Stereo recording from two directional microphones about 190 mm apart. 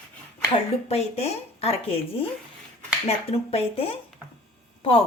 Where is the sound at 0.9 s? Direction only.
35° left (ahead or behind).